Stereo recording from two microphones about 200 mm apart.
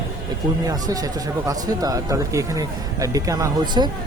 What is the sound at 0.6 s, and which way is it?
Speech, 20° right (ahead or behind).